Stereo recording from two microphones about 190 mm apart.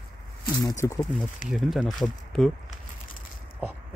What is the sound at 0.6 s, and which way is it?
Speech, 20° left (ahead or behind).